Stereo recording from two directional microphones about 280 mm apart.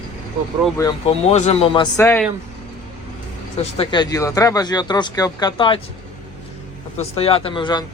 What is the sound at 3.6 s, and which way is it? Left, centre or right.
Speech, centre.